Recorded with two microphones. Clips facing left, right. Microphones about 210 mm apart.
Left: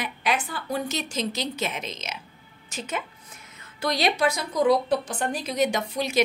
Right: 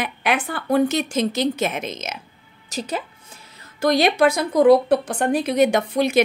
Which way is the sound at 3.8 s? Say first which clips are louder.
Right 7 dB; 50° right (ahead or behind).